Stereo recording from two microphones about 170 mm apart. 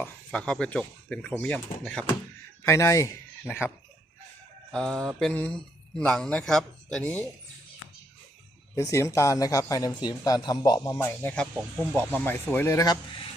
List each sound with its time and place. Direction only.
0.0 s speech: 5° left (ahead or behind)
2.6 s speech: 15° left (ahead or behind)
4.7 s speech: 5° left (ahead or behind)
8.7 s a man's voice: 15° left (ahead or behind)
11.5 s speech: 5° right (ahead or behind)
11.9 s speech: 10° left (ahead or behind); by 13.3 s 30° left (ahead or behind)